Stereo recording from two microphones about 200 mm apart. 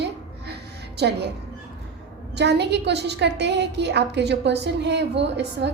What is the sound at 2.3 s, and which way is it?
A woman's voice, 60° right (ahead or behind).